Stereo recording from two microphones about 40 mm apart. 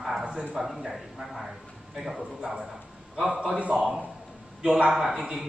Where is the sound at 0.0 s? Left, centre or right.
Centre.